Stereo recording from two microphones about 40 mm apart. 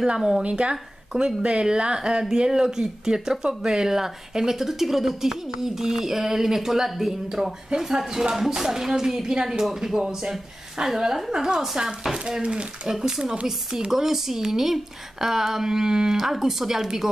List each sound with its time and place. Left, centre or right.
0.0 s speech: centre
0.4 s speech: right
12.4 s speech: right
12.8 s speech: centre
13.2 s speech: right
13.5 s speech: centre